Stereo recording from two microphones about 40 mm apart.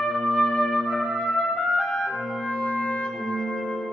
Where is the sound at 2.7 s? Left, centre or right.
Left.